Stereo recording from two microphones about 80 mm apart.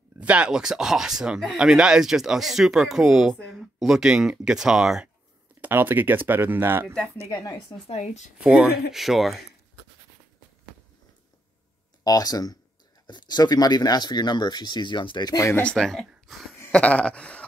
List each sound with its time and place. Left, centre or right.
0.2 s speech: centre
5.6 s speech: right
7.7 s speech: left
8.4 s speech: centre
12.0 s speech: left
15.3 s speech: left
15.6 s speech: centre
16.7 s a sound: centre